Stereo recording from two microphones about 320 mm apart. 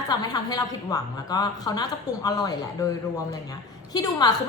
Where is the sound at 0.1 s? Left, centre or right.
Centre.